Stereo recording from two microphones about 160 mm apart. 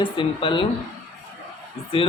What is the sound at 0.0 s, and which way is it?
Speech, 35° left (ahead or behind).